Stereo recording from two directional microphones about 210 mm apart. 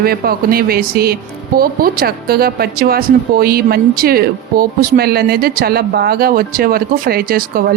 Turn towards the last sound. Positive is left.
turn(degrees=-45)  # may be behind; listen again after turning